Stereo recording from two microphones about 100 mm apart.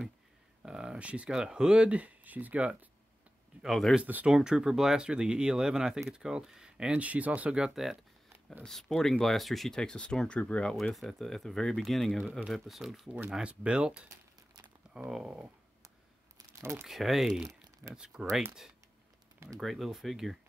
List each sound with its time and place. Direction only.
0.6 s speech: 10° right (ahead or behind)
3.6 s speech: centre (ahead or behind)
4.0 s speech: 15° right (ahead or behind); by 12.2 s centre (ahead or behind)
12.2 s speech: 15° right (ahead or behind)
12.5 s speech: centre (ahead or behind)
14.6 s a sound: 5° right (ahead or behind)
16.3 s a sound: 25° right (ahead or behind)
16.8 s speech: centre (ahead or behind)
19.6 s speech: centre (ahead or behind)